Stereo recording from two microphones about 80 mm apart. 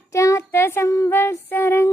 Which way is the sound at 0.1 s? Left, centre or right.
Left.